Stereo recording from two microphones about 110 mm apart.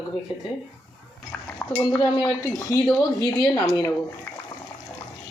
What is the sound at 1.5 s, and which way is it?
Dishes, 15° left (ahead or behind).